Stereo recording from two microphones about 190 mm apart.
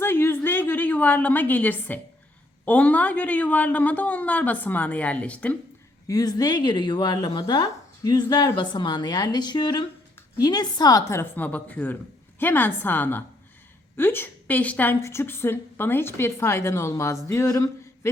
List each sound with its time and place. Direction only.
0.0 s a sound: 10° left (ahead or behind)
2.6 s a woman's voice: 5° left (ahead or behind)
6.1 s a woman's voice: 20° left (ahead or behind)